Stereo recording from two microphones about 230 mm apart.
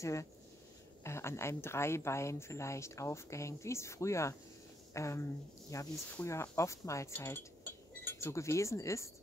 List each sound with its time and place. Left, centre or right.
0.0 s speech: centre